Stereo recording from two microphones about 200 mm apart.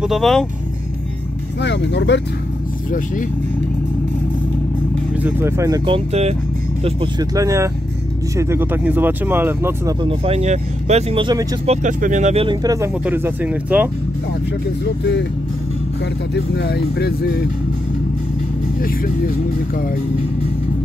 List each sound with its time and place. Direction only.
0.0 s speech: centre (ahead or behind)
1.6 s speech: 60° left (ahead or behind)
5.1 s speech: 10° right (ahead or behind)
5.9 s speech: 30° right (ahead or behind); by 9.9 s 10° right (ahead or behind)
10.0 s speech: 30° right (ahead or behind); by 13.8 s 10° right (ahead or behind)
16.5 s speech: 55° left (ahead or behind)